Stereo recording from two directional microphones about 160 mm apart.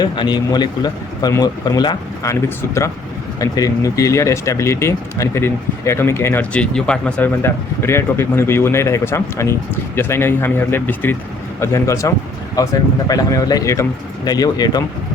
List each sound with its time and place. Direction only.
0.0 s a man's voice: 25° left (ahead or behind)